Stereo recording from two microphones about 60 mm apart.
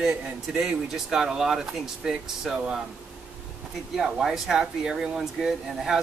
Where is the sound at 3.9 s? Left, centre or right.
Centre.